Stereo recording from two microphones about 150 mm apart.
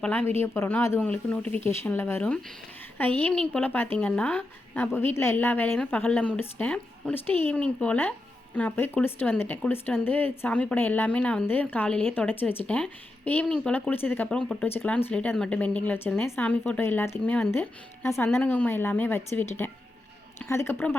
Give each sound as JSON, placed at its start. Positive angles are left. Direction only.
{"t": 0.0, "sound": "speech", "side_deg": 10}